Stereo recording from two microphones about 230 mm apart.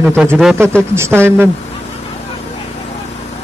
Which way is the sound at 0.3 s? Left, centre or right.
Centre.